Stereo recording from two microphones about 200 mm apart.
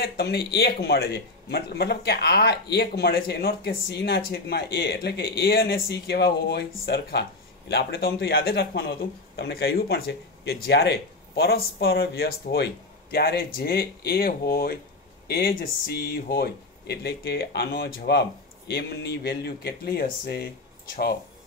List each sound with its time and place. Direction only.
0.0 s a man's voice: 50° left (ahead or behind)